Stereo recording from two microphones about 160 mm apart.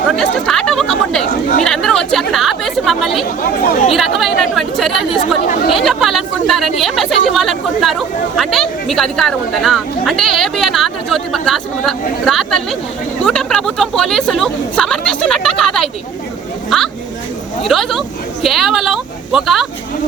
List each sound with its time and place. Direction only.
0.2 s a woman's voice: 5° left (ahead or behind)
3.4 s speech: 65° left (ahead or behind)
3.9 s a woman's voice: centre (ahead or behind)